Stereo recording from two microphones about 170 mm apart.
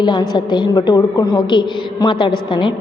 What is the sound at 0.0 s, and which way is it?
A woman's voice, 25° left (ahead or behind).